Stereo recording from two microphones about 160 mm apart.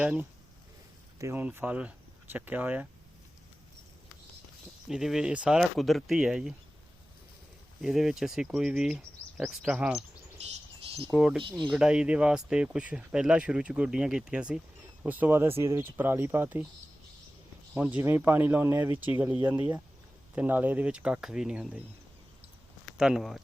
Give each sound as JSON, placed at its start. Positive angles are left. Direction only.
{"t": 0.0, "sound": "speech", "side_deg": -10}
{"t": 4.9, "sound": "speech", "side_deg": -5}
{"t": 7.8, "sound": "speech", "side_deg": 0}
{"t": 11.1, "sound": "speech", "side_deg": -5}
{"t": 11.4, "sound": "speech", "side_deg": -30}
{"t": 11.7, "sound": "speech", "side_deg": -5}
{"t": 17.9, "sound": "speech", "side_deg": -10}
{"t": 23.0, "sound": "speech", "side_deg": -5}